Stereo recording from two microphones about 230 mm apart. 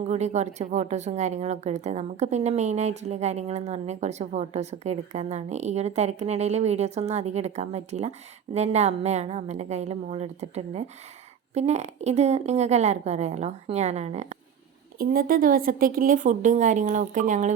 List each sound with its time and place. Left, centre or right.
0.0 s a woman's voice: right
14.9 s a woman's voice: right